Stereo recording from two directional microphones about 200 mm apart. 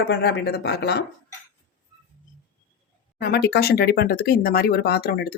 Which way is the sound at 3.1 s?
50° left (ahead or behind).